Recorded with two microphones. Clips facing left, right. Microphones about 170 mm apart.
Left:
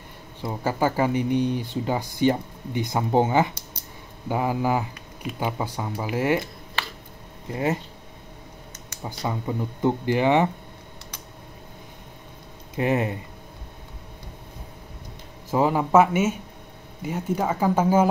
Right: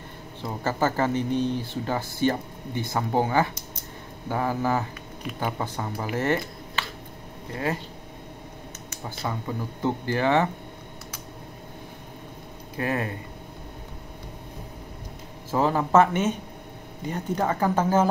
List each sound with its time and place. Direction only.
0.4 s speech: 10° left (ahead or behind)
9.2 s speech: 15° left (ahead or behind)
12.7 s speech: 20° left (ahead or behind)
15.5 s speech: 10° left (ahead or behind)